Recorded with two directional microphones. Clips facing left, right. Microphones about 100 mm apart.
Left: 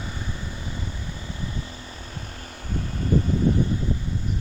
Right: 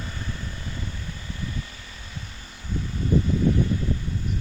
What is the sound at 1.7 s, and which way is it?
Vehicle, 40° left (ahead or behind).